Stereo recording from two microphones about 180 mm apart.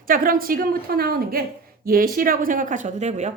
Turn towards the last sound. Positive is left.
turn(degrees=-40)  # may be behind; listen again after turning